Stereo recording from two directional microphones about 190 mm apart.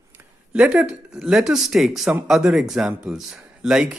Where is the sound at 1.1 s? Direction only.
5° right (ahead or behind).